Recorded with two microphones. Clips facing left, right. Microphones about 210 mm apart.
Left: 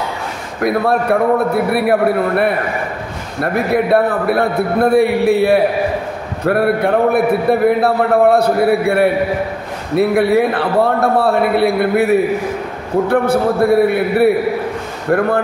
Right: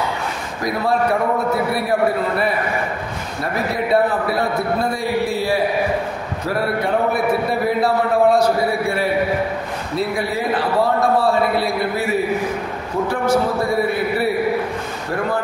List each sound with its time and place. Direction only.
0.6 s a man's voice: 60° left (ahead or behind)